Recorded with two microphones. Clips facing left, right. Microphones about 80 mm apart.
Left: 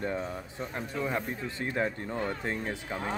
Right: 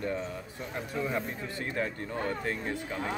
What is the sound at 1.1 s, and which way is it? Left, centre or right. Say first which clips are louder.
Speech: left 1 dB; left.